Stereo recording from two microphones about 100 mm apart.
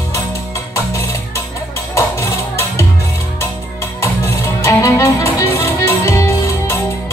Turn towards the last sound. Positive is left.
turn(degrees=25)  # may be behind; listen again after turning